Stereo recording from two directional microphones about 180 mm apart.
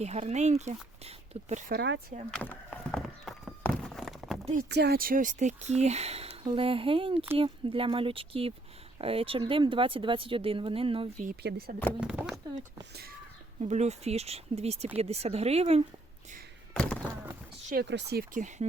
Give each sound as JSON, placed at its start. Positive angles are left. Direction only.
{"t": 0.0, "sound": "speech", "side_deg": -40}
{"t": 1.7, "sound": "speech", "side_deg": -65}
{"t": 2.3, "sound": "a sound", "side_deg": 5}
{"t": 4.7, "sound": "speech", "side_deg": -65}
{"t": 11.4, "sound": "speech", "side_deg": -60}
{"t": 11.9, "sound": "a sound", "side_deg": -5}
{"t": 13.6, "sound": "speech", "side_deg": -40}
{"t": 16.7, "sound": "thunk", "side_deg": 5}
{"t": 17.8, "sound": "speech", "side_deg": -70}